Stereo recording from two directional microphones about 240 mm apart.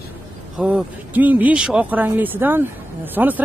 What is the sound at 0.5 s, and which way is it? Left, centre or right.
Speech, centre.